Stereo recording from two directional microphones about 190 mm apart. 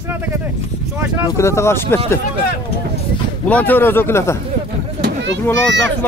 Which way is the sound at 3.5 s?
10° left (ahead or behind).